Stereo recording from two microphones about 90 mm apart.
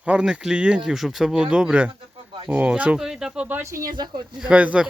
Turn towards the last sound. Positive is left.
turn(degrees=-15)  # may be behind; listen again after turning